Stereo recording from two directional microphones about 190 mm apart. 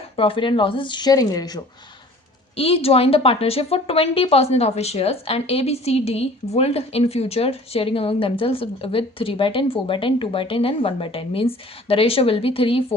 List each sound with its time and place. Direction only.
0.2 s a woman's voice: 25° left (ahead or behind)